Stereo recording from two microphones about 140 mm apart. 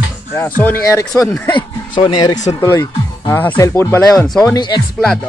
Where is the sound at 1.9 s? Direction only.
30° left (ahead or behind).